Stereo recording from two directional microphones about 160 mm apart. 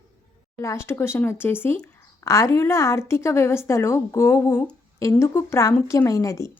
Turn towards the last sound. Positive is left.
turn(degrees=20)  # may be behind; listen again after turning